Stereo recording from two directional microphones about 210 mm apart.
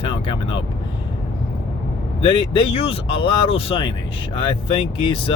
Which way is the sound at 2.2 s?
25° left (ahead or behind).